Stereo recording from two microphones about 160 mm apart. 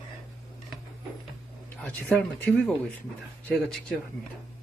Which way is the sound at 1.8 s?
10° left (ahead or behind).